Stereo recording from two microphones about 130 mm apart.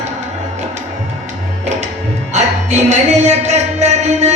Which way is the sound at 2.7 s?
60° right (ahead or behind).